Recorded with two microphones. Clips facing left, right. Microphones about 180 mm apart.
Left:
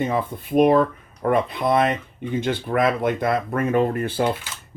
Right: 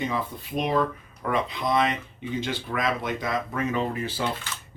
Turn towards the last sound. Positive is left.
turn(degrees=55)  # may be behind; listen again after turning